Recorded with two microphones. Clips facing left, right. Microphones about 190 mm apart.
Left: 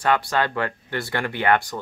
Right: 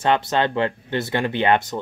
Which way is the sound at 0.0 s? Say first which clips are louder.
Right 2 dB; 25° right (ahead or behind).